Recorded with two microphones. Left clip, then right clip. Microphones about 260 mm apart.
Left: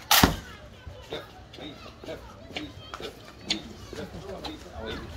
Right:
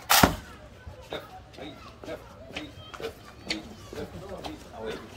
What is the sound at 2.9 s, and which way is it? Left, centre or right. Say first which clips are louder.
Music: right 2 dB; left.